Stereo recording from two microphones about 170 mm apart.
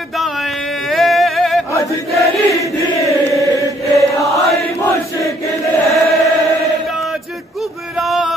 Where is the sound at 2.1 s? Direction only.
Centre (ahead or behind).